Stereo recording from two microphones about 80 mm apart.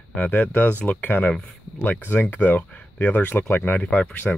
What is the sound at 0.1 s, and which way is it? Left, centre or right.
Speech, centre.